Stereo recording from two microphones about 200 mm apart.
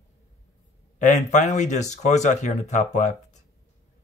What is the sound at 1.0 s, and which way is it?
Speech, 40° left (ahead or behind).